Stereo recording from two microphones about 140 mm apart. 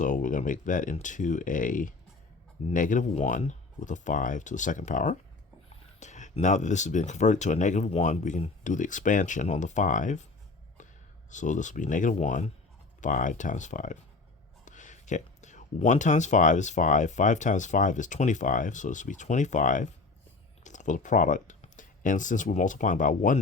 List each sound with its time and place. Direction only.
0.0 s speech: 65° left (ahead or behind)
11.3 s speech: 60° left (ahead or behind)
13.0 s speech: 70° left (ahead or behind)